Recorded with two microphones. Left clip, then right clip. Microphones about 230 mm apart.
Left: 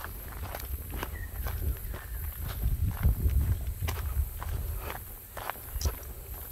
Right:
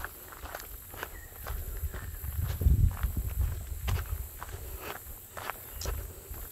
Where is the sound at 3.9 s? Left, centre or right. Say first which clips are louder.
Left 1 dB; left.